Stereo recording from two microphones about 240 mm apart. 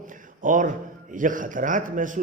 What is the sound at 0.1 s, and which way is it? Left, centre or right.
A man's voice, right.